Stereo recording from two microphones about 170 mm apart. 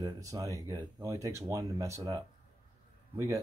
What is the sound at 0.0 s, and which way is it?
Speech, 20° right (ahead or behind).